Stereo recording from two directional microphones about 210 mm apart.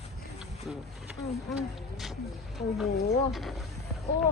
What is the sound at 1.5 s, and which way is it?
Speech, centre (ahead or behind).